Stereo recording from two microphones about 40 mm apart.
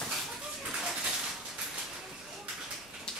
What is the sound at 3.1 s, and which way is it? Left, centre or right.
Raindrop, centre.